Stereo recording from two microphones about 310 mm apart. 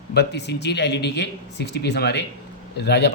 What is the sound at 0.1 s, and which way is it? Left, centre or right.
A man's voice, left.